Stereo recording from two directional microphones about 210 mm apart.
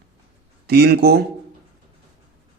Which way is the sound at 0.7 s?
50° right (ahead or behind).